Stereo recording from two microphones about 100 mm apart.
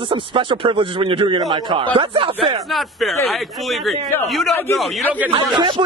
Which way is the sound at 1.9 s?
60° right (ahead or behind).